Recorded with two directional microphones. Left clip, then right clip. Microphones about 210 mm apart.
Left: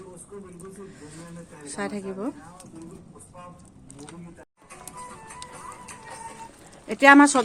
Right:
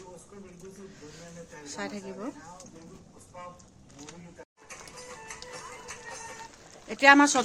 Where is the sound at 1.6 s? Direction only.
25° left (ahead or behind).